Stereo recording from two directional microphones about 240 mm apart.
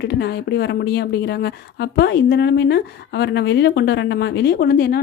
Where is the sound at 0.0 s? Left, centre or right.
Left.